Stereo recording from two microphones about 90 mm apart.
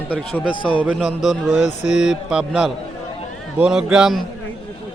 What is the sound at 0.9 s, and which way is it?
A man's voice, centre (ahead or behind).